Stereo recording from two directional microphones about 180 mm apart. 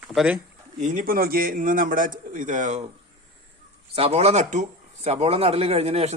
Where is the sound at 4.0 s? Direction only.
35° right (ahead or behind).